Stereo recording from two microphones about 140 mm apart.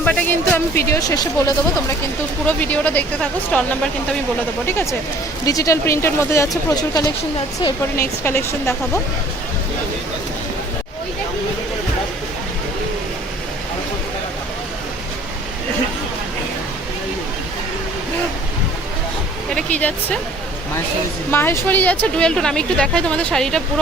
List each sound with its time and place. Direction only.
0.0 s speech: 10° left (ahead or behind)
2.5 s speech: 10° left (ahead or behind)
19.5 s speech: 10° left (ahead or behind)
21.2 s speech: 15° left (ahead or behind)